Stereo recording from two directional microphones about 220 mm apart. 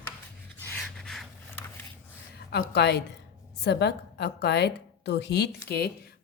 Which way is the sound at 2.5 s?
50° left (ahead or behind).